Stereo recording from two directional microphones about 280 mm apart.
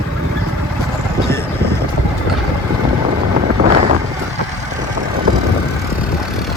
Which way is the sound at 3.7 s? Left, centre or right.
Right.